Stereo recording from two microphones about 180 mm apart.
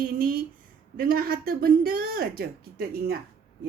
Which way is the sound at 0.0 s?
55° right (ahead or behind).